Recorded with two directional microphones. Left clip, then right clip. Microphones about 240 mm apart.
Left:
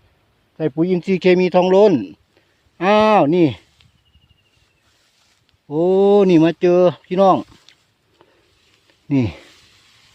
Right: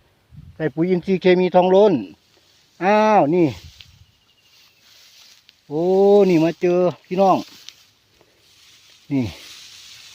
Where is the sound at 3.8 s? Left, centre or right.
Right.